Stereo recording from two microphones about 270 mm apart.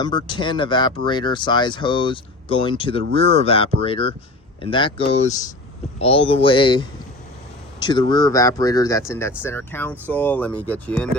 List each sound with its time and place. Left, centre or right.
0.0 s speech: centre